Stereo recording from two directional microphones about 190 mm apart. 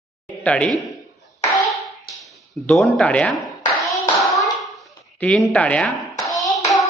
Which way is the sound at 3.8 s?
Centre (ahead or behind).